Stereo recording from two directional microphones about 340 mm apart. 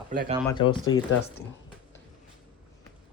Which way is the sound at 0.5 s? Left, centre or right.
Centre.